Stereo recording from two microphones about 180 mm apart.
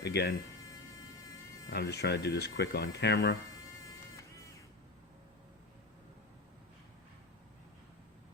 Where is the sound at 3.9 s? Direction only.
15° left (ahead or behind).